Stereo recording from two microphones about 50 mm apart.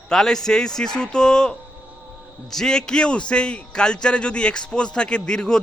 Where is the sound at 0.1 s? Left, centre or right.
Centre.